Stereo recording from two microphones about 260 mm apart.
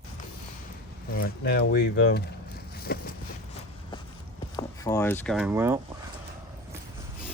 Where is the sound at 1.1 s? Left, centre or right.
Left.